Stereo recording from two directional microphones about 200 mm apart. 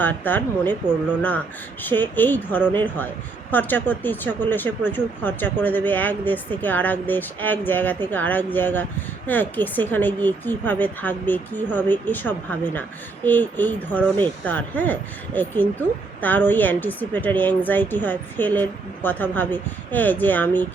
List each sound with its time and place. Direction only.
0.0 s speech: 10° left (ahead or behind)
1.8 s speech: 10° left (ahead or behind)